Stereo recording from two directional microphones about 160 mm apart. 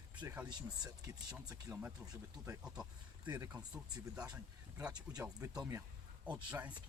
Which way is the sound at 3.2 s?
25° right (ahead or behind).